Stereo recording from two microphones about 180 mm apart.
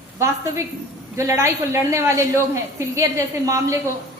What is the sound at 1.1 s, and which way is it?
A woman's voice, 15° right (ahead or behind).